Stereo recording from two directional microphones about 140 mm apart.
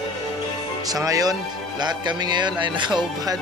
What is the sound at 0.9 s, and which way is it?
Speech, 25° right (ahead or behind).